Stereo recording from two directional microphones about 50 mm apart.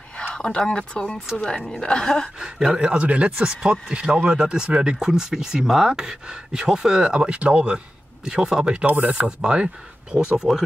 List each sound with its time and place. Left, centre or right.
0.3 s speech: centre
2.7 s speech: centre
8.3 s speech: centre
9.1 s speech: right